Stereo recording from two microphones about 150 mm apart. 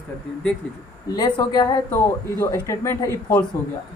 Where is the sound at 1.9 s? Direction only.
15° left (ahead or behind).